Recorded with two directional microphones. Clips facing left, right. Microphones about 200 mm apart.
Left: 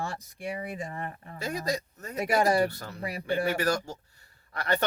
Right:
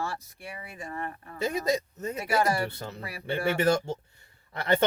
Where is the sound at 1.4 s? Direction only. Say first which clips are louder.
Right 4 dB; 20° right (ahead or behind).